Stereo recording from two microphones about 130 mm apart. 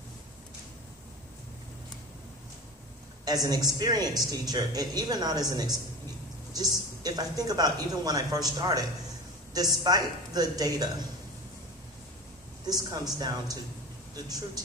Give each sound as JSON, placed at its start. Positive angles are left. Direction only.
{"t": 3.3, "sound": "speech", "side_deg": -30}
{"t": 12.6, "sound": "a woman's voice", "side_deg": -30}